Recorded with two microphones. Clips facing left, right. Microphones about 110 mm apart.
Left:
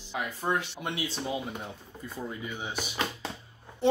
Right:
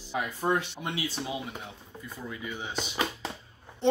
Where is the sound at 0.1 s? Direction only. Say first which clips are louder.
Right 2 dB; 15° right (ahead or behind).